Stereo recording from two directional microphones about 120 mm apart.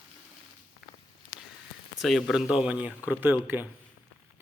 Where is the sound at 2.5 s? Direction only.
10° right (ahead or behind).